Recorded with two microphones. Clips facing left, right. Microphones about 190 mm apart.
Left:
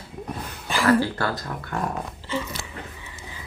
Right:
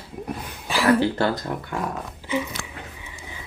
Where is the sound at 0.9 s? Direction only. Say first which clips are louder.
Right 2 dB; 20° right (ahead or behind).